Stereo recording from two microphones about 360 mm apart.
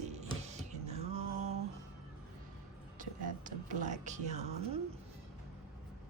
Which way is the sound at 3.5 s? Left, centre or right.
Right.